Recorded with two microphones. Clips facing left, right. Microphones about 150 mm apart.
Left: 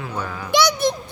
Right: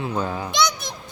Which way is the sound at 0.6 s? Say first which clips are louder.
Left 5 dB; 65° left (ahead or behind).